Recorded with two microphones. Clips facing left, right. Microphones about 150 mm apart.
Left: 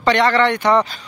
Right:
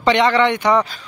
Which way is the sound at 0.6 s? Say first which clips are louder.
Left 1 dB; 5° right (ahead or behind).